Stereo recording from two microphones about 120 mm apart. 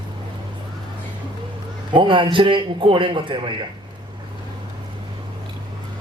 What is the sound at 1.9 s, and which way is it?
A man's voice, 45° right (ahead or behind).